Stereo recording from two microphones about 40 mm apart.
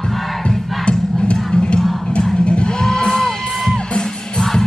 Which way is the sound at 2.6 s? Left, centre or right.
Centre.